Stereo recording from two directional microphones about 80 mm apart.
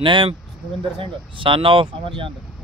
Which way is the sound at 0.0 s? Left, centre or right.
Right.